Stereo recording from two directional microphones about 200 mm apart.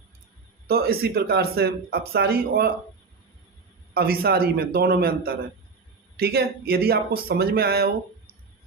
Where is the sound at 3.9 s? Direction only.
50° right (ahead or behind).